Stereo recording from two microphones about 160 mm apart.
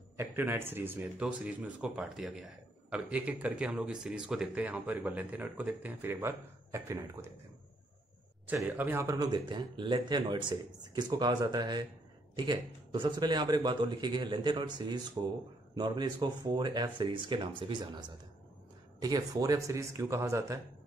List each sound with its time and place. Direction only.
0.2 s speech: 15° right (ahead or behind)
8.5 s speech: 10° right (ahead or behind)